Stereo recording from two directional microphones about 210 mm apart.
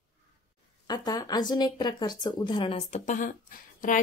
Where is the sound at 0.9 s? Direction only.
20° left (ahead or behind); by 3.3 s 35° left (ahead or behind).